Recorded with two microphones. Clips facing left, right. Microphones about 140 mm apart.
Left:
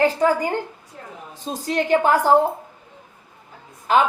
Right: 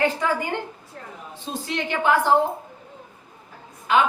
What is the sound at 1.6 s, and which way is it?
Speech, 40° left (ahead or behind).